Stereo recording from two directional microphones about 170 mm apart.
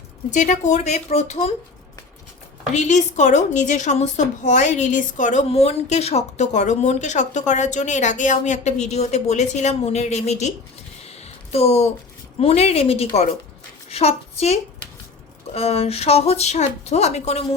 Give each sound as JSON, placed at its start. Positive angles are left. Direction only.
{"t": 0.3, "sound": "a woman's voice", "side_deg": 45}
{"t": 2.7, "sound": "a woman's voice", "side_deg": 45}
{"t": 11.0, "sound": "a sound", "side_deg": 35}
{"t": 12.4, "sound": "a child's voice", "side_deg": 35}